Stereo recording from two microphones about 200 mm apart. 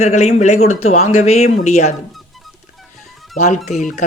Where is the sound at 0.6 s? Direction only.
90° left.